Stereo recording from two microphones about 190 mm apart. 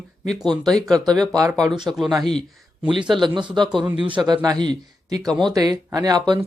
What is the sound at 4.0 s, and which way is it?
Speech, 25° right (ahead or behind).